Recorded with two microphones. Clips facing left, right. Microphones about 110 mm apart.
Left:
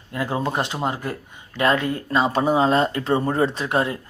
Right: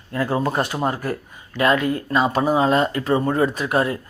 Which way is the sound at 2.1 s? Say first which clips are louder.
Even; 30° left (ahead or behind).